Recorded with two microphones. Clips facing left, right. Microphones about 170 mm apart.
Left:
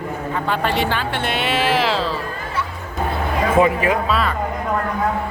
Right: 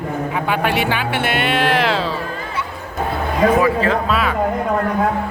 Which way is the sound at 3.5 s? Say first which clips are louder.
Even; 20° left (ahead or behind).